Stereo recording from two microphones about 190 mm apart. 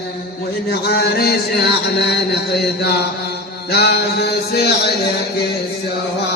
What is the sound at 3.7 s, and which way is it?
Mantra, 60° left (ahead or behind).